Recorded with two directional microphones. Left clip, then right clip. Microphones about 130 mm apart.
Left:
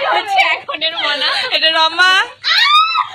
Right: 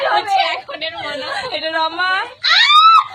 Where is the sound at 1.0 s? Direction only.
Centre (ahead or behind).